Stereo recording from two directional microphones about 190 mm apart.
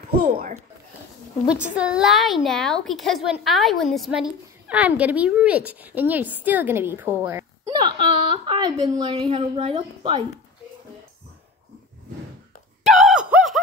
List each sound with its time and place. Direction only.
0.1 s speech: 55° right (ahead or behind)
1.5 s a woman's voice: 5° right (ahead or behind)
7.8 s a woman's voice: 25° right (ahead or behind)
12.8 s a sound: centre (ahead or behind)